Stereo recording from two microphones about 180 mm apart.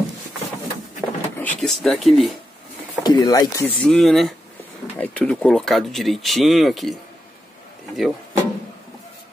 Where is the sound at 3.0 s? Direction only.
20° left (ahead or behind).